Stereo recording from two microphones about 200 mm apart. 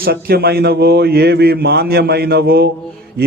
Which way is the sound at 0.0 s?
50° right (ahead or behind).